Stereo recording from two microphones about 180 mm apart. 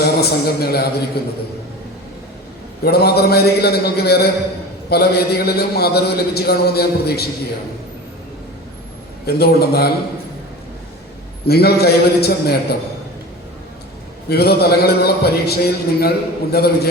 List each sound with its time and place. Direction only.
0.0 s a man's voice: 60° left (ahead or behind)
2.8 s a man's voice: 60° left (ahead or behind)
9.2 s a man's voice: 60° left (ahead or behind)
11.4 s a man's voice: 60° left (ahead or behind)
14.3 s a man's voice: 60° left (ahead or behind)